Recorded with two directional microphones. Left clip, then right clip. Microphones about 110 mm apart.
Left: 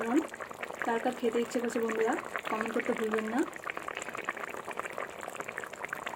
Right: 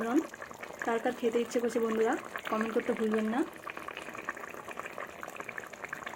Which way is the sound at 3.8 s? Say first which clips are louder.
Left 3 dB; 10° left (ahead or behind).